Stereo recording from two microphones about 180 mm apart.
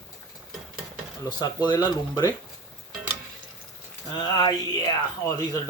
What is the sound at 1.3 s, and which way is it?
Speech, 20° left (ahead or behind).